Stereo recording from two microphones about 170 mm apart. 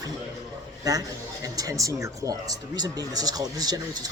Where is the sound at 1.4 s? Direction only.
20° right (ahead or behind).